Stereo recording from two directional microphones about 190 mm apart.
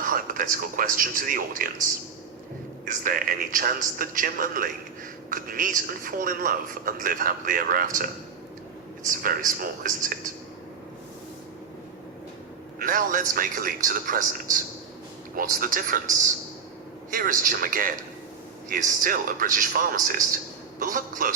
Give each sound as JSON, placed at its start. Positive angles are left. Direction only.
{"t": 0.1, "sound": "a man's voice", "side_deg": -45}
{"t": 2.8, "sound": "a man's voice", "side_deg": -45}
{"t": 12.8, "sound": "a man's voice", "side_deg": -45}
{"t": 17.1, "sound": "a man's voice", "side_deg": -45}